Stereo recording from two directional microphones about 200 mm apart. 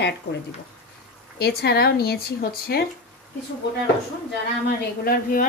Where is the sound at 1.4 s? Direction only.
55° left (ahead or behind).